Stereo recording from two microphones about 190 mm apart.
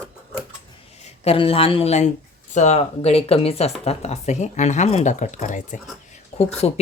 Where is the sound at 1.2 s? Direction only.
30° left (ahead or behind).